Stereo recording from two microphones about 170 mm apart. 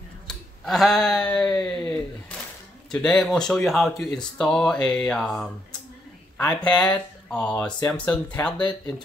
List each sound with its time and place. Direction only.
0.3 s speech: centre (ahead or behind)
8.5 s speech: 25° left (ahead or behind)